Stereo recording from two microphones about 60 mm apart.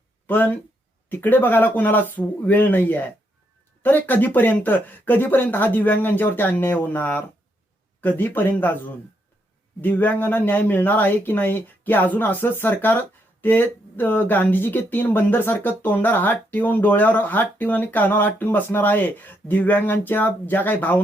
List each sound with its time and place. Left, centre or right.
0.3 s speech: left